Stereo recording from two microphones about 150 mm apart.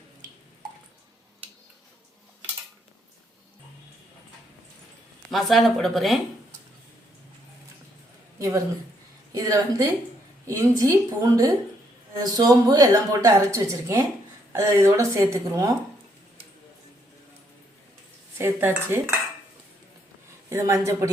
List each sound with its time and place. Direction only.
5.3 s speech: centre (ahead or behind)
8.4 s a woman's voice: 20° right (ahead or behind)
18.3 s dishes: 15° right (ahead or behind)
20.5 s a woman's voice: 20° right (ahead or behind)